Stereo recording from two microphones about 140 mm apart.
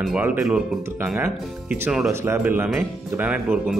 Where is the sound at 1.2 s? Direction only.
15° right (ahead or behind).